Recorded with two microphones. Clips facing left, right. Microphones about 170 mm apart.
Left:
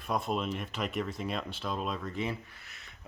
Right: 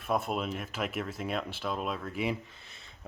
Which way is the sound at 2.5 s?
25° right (ahead or behind).